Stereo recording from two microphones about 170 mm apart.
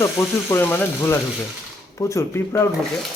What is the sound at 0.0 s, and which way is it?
Speech, 15° left (ahead or behind).